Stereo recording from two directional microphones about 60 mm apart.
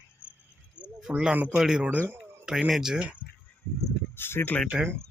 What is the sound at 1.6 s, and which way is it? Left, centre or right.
Speech, centre.